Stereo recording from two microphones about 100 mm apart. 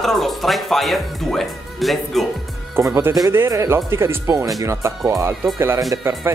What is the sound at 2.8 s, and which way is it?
Speech, 25° right (ahead or behind).